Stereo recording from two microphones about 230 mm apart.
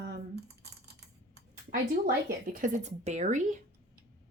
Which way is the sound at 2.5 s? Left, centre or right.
Right.